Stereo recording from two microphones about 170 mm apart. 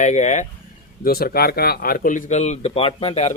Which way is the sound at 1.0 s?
60° left (ahead or behind).